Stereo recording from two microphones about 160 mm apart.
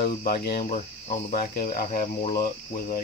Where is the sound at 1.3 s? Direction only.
65° left (ahead or behind).